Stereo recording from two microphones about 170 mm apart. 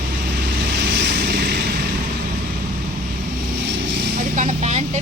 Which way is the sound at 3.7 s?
90° right.